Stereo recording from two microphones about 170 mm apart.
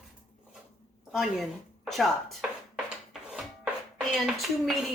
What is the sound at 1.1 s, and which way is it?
Speech, centre (ahead or behind).